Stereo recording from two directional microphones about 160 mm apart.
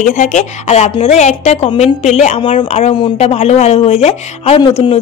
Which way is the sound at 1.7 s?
30° left (ahead or behind).